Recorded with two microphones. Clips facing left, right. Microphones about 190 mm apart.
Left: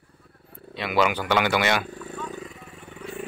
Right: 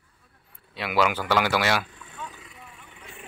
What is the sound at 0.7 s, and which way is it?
Speech, 5° right (ahead or behind).